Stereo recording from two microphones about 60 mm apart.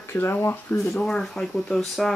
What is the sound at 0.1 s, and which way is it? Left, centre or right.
Speech, left.